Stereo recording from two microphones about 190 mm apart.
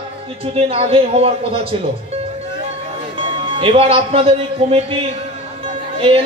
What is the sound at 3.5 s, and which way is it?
A man's voice, 30° right (ahead or behind).